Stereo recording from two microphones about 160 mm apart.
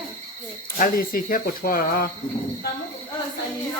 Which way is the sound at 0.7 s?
60° left (ahead or behind).